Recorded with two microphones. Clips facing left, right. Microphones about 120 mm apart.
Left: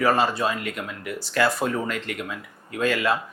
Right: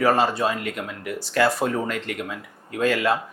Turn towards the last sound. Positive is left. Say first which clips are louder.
# right 2 dB
turn(degrees=-50)  # may be behind; listen again after turning